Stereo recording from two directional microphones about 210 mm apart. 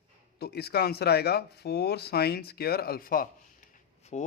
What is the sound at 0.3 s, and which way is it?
A man's voice, 50° left (ahead or behind).